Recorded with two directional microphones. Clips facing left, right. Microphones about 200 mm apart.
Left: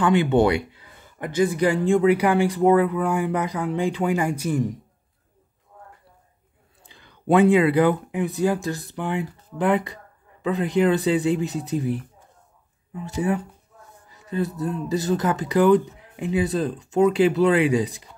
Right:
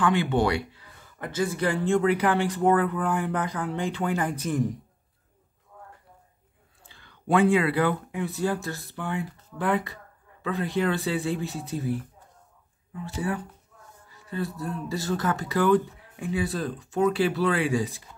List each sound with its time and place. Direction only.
0.0 s speech: 20° left (ahead or behind)
6.9 s speech: 20° left (ahead or behind)